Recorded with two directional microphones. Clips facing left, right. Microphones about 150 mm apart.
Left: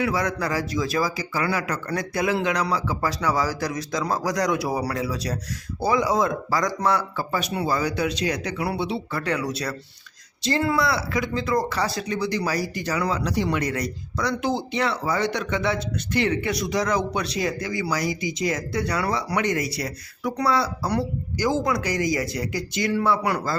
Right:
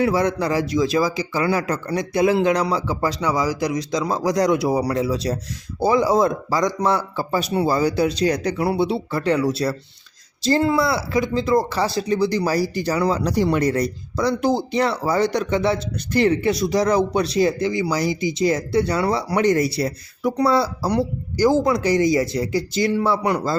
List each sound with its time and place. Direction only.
0.0 s speech: 30° right (ahead or behind)
6.6 s speech: 20° right (ahead or behind)